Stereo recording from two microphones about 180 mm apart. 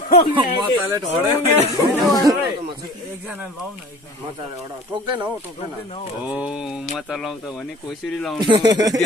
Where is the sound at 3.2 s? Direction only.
5° right (ahead or behind).